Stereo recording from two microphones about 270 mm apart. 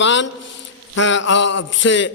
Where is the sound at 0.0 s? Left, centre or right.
Left.